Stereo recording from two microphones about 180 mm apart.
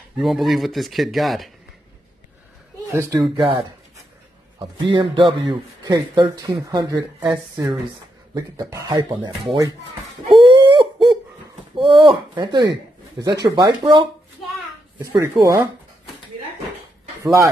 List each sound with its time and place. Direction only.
0.2 s speech: centre (ahead or behind)
2.9 s speech: 15° right (ahead or behind)
7.2 s speech: 10° right (ahead or behind)
10.2 s a sound: 30° right (ahead or behind)
11.7 s speech: 25° right (ahead or behind)
17.2 s speech: 15° right (ahead or behind)